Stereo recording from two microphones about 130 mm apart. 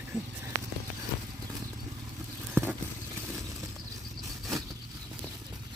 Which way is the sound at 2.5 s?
15° right (ahead or behind).